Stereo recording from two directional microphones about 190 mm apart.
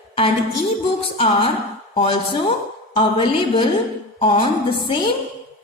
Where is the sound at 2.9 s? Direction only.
30° left (ahead or behind).